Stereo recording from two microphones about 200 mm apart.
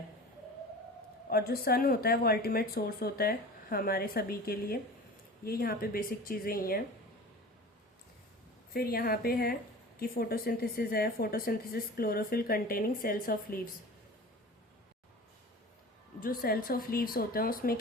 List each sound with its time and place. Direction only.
1.3 s a woman's voice: 50° left (ahead or behind)
8.7 s a woman's voice: 50° left (ahead or behind)
16.2 s a woman's voice: 45° left (ahead or behind)